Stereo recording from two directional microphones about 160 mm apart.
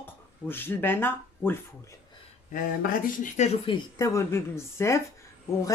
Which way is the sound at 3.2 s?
45° left (ahead or behind).